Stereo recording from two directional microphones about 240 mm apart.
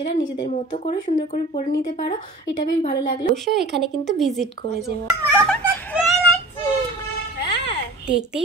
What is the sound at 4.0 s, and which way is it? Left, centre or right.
Speech, centre.